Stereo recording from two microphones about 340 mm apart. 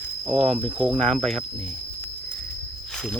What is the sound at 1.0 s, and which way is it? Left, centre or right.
Speech, centre.